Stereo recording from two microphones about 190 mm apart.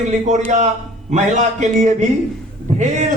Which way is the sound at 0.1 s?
40° right (ahead or behind).